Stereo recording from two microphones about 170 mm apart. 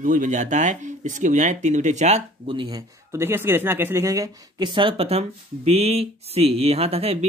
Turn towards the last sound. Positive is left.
turn(degrees=-35)  # may be behind; listen again after turning